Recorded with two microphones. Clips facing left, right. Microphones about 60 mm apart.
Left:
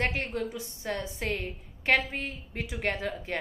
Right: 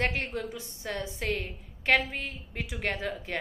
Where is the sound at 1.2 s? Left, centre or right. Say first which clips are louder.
Even; centre.